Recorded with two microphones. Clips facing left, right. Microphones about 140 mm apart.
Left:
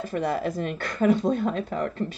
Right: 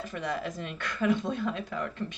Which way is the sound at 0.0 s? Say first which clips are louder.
Left 7 dB; 40° left (ahead or behind).